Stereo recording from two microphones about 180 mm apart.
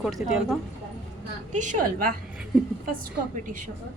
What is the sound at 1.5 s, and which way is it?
Speech, 45° right (ahead or behind).